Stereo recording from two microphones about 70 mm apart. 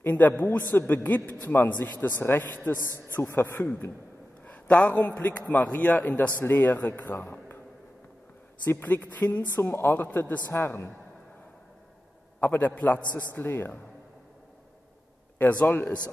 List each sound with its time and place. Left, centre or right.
0.0 s a man's voice: left
2.8 s a man's voice: right
3.2 s speech: left
4.5 s a man's voice: centre; by 7.5 s left
8.6 s a man's voice: left
10.0 s a man's voice: left
10.5 s speech: left
12.4 s a man's voice: left
15.3 s speech: left